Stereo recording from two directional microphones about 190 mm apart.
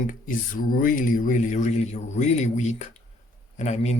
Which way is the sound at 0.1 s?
45° left (ahead or behind).